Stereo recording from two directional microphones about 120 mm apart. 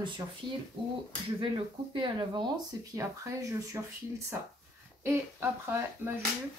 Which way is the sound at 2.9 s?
25° right (ahead or behind).